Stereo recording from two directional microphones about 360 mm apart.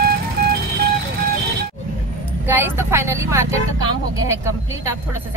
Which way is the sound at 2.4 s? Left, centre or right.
Centre.